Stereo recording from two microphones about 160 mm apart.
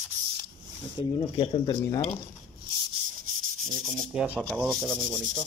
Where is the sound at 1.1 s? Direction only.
30° left (ahead or behind).